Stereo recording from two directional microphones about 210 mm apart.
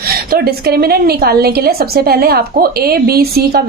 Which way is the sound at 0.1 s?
45° right (ahead or behind).